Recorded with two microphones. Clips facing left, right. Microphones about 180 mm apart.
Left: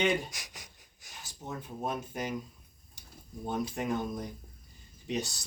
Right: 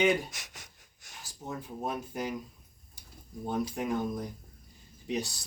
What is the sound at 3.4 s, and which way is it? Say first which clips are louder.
Speech: right 1 dB; centre (ahead or behind).